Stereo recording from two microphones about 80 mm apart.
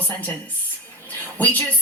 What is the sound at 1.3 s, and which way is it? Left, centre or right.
Speech, left.